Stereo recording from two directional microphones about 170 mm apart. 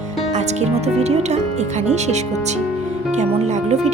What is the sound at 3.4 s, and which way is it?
Speech, 40° right (ahead or behind).